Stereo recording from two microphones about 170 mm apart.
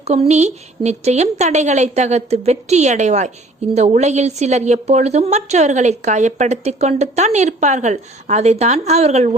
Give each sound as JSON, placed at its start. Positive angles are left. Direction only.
{"t": 0.0, "sound": "a woman's voice", "side_deg": -40}